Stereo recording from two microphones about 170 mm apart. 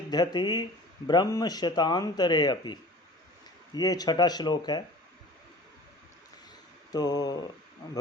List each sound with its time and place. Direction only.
0.1 s speech: 25° left (ahead or behind)
3.8 s speech: 20° left (ahead or behind)
6.9 s speech: 25° left (ahead or behind)